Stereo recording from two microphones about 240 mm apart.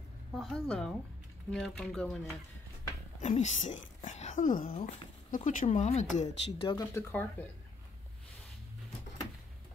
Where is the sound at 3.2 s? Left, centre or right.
Left.